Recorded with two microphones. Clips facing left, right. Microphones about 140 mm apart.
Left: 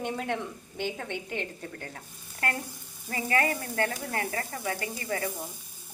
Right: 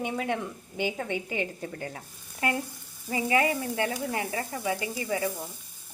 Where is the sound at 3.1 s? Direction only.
15° right (ahead or behind).